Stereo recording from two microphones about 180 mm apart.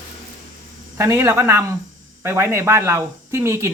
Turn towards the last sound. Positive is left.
turn(degrees=-15)  # may be behind; listen again after turning